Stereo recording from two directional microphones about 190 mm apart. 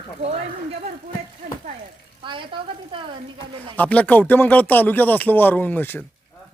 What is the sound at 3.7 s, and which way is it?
Speech, 10° left (ahead or behind).